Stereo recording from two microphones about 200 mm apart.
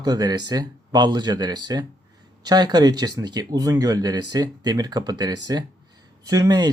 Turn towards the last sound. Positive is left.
turn(degrees=-20)  # may be behind; listen again after turning